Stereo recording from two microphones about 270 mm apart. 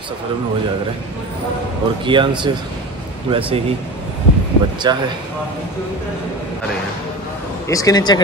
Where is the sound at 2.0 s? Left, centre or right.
Centre.